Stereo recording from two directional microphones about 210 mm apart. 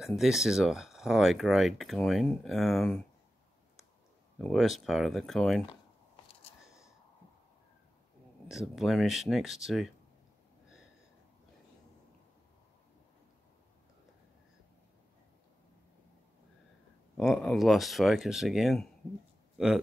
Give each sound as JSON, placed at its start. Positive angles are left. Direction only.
{"t": 0.0, "sound": "speech", "side_deg": 0}
{"t": 4.4, "sound": "speech", "side_deg": 0}
{"t": 8.5, "sound": "speech", "side_deg": 0}
{"t": 17.2, "sound": "speech", "side_deg": 0}